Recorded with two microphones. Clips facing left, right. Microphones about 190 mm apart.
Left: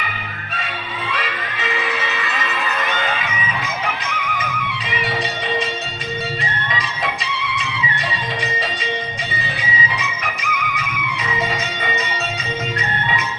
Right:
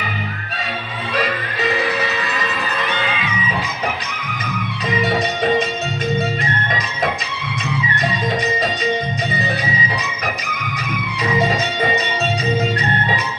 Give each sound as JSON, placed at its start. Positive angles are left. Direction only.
{"t": 1.1, "sound": "music", "side_deg": -40}
{"t": 6.7, "sound": "music", "side_deg": -45}
{"t": 9.6, "sound": "music", "side_deg": -40}